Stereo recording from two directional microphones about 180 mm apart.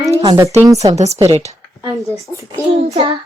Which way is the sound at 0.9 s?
35° right (ahead or behind).